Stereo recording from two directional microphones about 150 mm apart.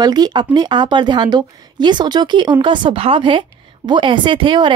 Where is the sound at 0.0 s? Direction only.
25° right (ahead or behind).